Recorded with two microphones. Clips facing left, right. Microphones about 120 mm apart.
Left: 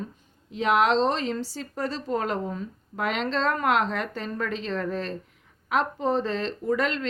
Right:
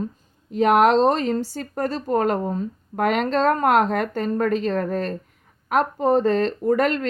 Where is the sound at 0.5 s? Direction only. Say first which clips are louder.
Right 6 dB; 45° right (ahead or behind).